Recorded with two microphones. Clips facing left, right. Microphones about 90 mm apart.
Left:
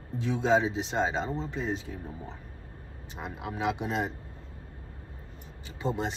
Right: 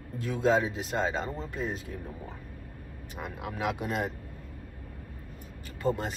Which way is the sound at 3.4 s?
5° right (ahead or behind).